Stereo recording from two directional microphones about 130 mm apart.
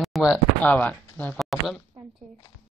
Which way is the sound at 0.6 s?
10° left (ahead or behind).